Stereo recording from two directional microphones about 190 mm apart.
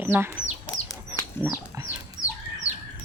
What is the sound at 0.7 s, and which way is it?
Chicken, 15° left (ahead or behind).